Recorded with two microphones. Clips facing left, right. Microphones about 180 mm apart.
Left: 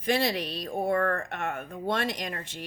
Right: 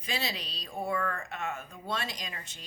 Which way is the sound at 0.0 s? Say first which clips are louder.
Left 10 dB; 55° left (ahead or behind).